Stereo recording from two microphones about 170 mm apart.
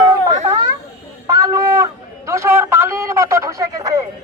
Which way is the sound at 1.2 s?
20° right (ahead or behind).